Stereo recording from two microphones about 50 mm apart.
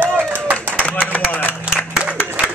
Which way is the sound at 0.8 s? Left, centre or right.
Left.